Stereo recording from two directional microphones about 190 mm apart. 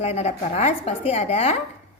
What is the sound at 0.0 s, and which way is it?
A woman's voice, 35° left (ahead or behind).